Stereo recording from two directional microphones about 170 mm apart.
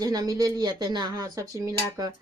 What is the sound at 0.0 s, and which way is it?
Speech, 20° right (ahead or behind).